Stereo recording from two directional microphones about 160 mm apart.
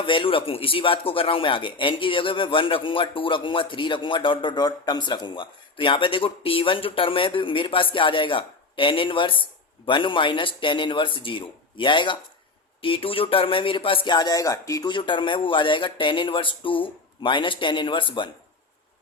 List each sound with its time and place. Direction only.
0.0 s speech: 35° left (ahead or behind)